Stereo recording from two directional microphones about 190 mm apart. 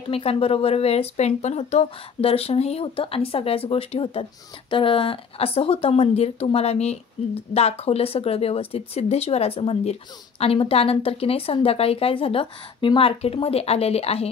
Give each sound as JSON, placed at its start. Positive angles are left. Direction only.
{"t": 0.1, "sound": "speech", "side_deg": 30}